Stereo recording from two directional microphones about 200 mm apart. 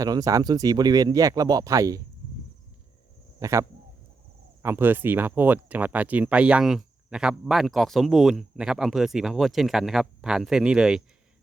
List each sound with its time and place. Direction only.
0.0 s speech: 15° right (ahead or behind)
3.4 s speech: 15° right (ahead or behind)